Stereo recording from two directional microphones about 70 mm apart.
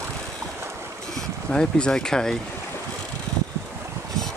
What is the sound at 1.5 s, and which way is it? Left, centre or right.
Speech, centre.